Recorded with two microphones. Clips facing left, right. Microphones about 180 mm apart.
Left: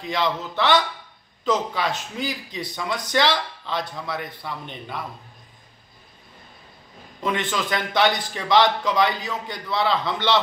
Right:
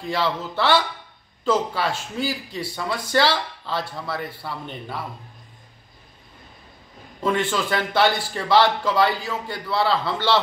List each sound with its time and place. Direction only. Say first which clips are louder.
0.0 s a man's voice: even; 5° right (ahead or behind)
7.2 s a man's voice: right 3 dB; 5° right (ahead or behind)